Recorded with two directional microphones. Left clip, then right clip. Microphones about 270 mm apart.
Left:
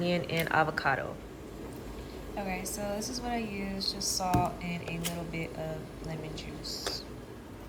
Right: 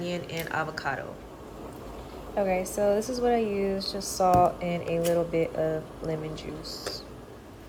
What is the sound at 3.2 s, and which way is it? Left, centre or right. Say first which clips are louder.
Speech: right 11 dB; centre.